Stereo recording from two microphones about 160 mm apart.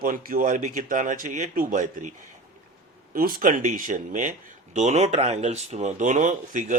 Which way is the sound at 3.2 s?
65° right (ahead or behind).